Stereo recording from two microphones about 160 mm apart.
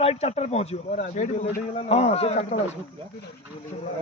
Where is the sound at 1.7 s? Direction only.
40° left (ahead or behind).